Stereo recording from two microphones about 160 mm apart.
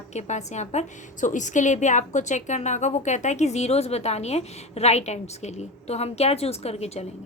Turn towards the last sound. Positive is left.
turn(degrees=40)  # may be behind; listen again after turning